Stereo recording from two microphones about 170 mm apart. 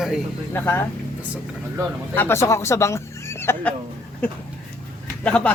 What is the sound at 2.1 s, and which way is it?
Speech, 15° left (ahead or behind).